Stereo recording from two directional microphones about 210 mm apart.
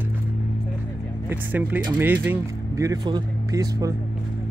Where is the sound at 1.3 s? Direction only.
10° right (ahead or behind).